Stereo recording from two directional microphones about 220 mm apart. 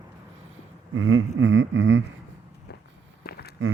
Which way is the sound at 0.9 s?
65° right (ahead or behind).